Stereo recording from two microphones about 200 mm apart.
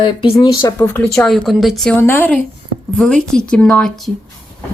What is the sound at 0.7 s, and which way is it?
Speech, 10° left (ahead or behind).